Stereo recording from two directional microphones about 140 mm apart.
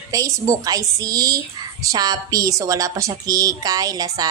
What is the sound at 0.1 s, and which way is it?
A woman's voice, 25° right (ahead or behind).